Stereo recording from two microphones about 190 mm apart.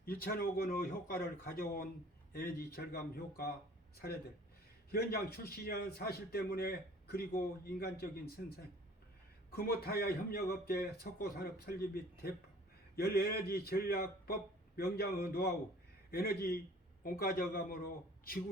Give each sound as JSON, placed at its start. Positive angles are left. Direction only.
{"t": 0.0, "sound": "a man's voice", "side_deg": 50}